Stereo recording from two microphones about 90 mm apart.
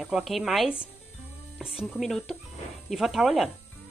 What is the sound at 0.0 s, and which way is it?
Speech, 5° right (ahead or behind).